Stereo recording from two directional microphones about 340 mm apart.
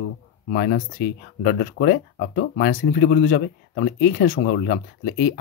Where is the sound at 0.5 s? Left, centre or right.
Left.